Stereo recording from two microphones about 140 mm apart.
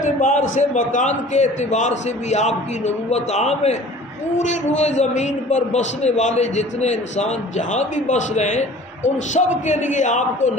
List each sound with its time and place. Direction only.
0.0 s a man's voice: 65° left (ahead or behind)